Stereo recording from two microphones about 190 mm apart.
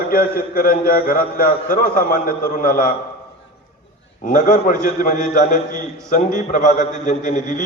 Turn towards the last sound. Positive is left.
turn(degrees=45)  # may be behind; listen again after turning